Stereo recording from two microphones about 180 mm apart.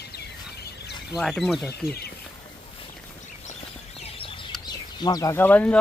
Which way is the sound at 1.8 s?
60° left (ahead or behind).